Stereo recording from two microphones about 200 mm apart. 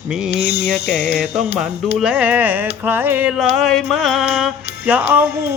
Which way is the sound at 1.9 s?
5° right (ahead or behind).